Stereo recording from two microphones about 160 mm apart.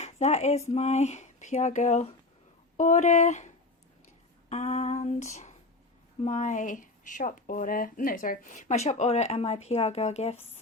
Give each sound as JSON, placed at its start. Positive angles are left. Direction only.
{"t": 0.0, "sound": "speech", "side_deg": 45}